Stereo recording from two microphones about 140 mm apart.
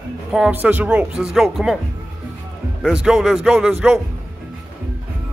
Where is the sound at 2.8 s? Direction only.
5° right (ahead or behind).